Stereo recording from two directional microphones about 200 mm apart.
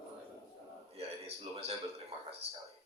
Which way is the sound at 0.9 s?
30° right (ahead or behind).